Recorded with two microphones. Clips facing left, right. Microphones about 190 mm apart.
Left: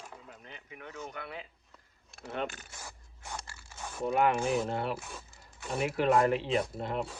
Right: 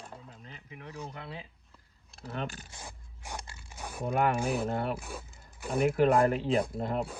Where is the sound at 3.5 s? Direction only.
15° right (ahead or behind).